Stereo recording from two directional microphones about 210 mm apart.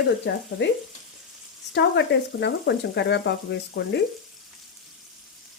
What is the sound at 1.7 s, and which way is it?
Frying, 55° left (ahead or behind).